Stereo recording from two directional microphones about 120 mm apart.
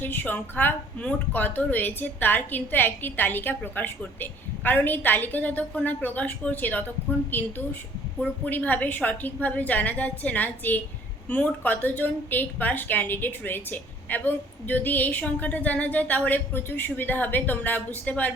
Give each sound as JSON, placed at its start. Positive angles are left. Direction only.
{"t": 0.0, "sound": "a woman's voice", "side_deg": 15}